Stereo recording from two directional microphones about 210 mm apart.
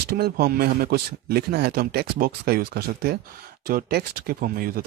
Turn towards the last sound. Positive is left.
turn(degrees=-45)  # may be behind; listen again after turning